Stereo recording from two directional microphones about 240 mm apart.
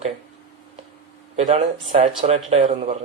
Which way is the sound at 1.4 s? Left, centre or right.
Right.